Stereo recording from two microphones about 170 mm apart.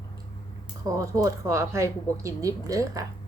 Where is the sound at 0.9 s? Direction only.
20° right (ahead or behind).